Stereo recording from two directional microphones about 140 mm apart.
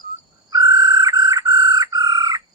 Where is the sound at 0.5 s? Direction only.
25° right (ahead or behind).